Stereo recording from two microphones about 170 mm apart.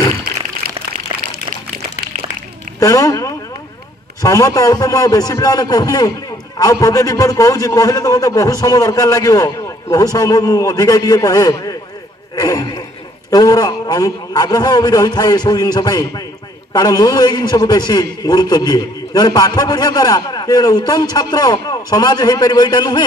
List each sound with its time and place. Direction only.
2.8 s a man's voice: 20° left (ahead or behind)
12.4 s a sound: 20° left (ahead or behind)
13.3 s a man's voice: 20° left (ahead or behind)